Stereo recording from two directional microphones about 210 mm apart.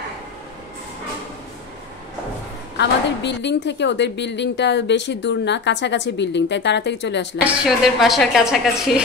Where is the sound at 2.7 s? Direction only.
55° left (ahead or behind).